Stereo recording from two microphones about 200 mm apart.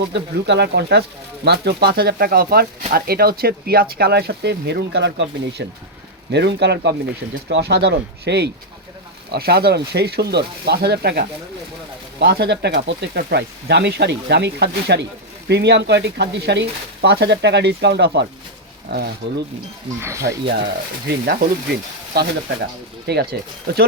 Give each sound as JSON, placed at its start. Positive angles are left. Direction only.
{"t": 0.0, "sound": "speech", "side_deg": -55}
{"t": 20.0, "sound": "speech", "side_deg": -15}
{"t": 21.1, "sound": "speech", "side_deg": -50}